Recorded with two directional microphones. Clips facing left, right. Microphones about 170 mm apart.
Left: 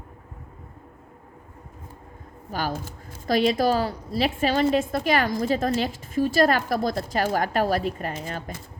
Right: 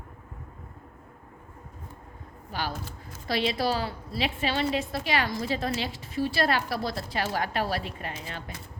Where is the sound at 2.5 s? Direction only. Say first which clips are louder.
Left 5 dB; 45° left (ahead or behind).